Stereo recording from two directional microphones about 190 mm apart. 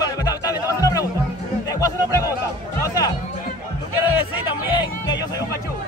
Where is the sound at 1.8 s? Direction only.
15° left (ahead or behind).